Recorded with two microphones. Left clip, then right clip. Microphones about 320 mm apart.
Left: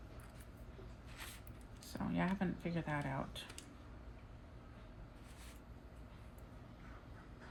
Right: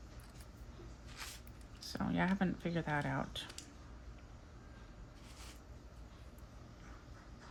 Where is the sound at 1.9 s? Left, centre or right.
Right.